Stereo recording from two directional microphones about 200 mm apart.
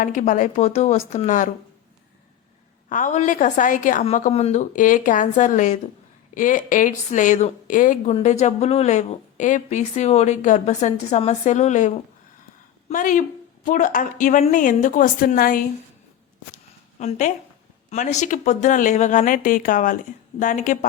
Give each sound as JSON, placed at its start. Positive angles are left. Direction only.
{"t": 0.0, "sound": "a woman's voice", "side_deg": 40}
{"t": 2.9, "sound": "a woman's voice", "side_deg": 40}
{"t": 17.0, "sound": "a woman's voice", "side_deg": 35}